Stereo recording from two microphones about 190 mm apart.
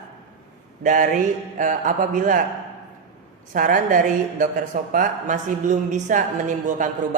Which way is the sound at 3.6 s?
45° right (ahead or behind).